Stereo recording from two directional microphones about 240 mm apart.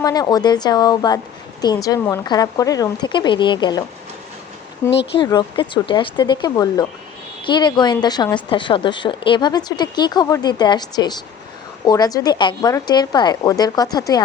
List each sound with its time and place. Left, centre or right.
0.0 s speech: centre